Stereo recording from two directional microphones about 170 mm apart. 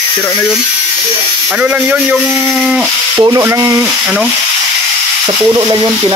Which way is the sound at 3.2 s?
20° right (ahead or behind).